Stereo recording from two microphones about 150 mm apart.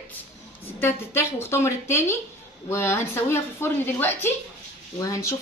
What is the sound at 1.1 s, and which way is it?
A woman's voice, 15° left (ahead or behind).